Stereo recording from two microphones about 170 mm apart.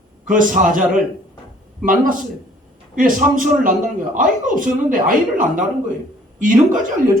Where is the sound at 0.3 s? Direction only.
50° right (ahead or behind).